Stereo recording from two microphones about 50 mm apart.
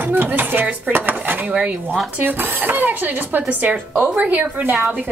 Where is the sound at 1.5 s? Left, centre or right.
Right.